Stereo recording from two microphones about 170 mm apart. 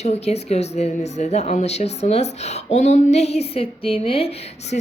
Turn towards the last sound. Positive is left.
turn(degrees=35)  # may be behind; listen again after turning